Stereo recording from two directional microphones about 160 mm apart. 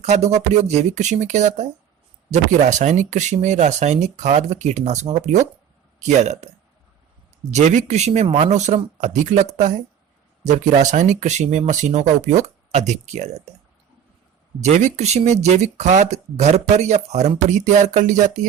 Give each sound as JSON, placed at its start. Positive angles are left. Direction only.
{"t": 0.0, "sound": "speech", "side_deg": -45}
{"t": 7.5, "sound": "speech", "side_deg": -45}
{"t": 14.6, "sound": "speech", "side_deg": -50}